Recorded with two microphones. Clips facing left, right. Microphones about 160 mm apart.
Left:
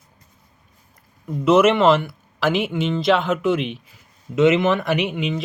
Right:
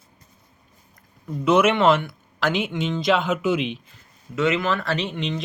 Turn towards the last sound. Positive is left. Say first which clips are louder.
# left 4 dB
turn(degrees=5)  # may be behind; listen again after turning